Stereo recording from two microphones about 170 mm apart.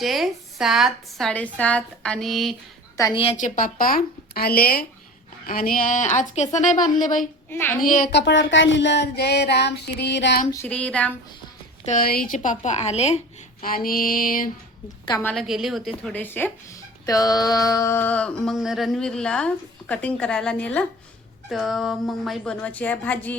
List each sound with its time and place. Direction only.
0.0 s a woman's voice: centre (ahead or behind)
3.0 s a woman's voice: 30° left (ahead or behind)
3.3 s a woman's voice: 50° left (ahead or behind)
7.5 s a sound: 15° left (ahead or behind)
7.9 s a woman's voice: 55° left (ahead or behind)
8.1 s a sound: 90° left
10.5 s a sound: 10° left (ahead or behind)
11.9 s a woman's voice: 55° left (ahead or behind); by 13.2 s 40° left (ahead or behind)
13.6 s a woman's voice: 55° left (ahead or behind)
15.2 s a woman's voice: 5° left (ahead or behind)
17.1 s a sound: 20° left (ahead or behind)
21.5 s a woman's voice: centre (ahead or behind)